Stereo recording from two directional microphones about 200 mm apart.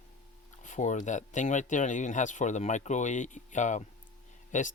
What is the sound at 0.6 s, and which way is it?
Speech, 40° left (ahead or behind).